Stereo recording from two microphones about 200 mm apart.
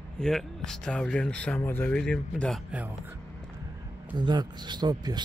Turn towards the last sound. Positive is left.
turn(degrees=-20)  # may be behind; listen again after turning